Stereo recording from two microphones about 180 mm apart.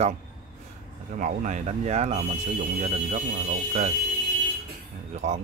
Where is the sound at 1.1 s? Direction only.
45° right (ahead or behind).